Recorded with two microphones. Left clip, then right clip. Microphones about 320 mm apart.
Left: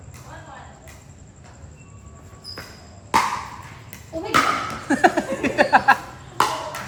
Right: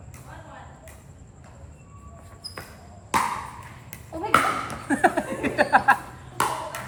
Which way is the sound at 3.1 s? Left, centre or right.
Centre.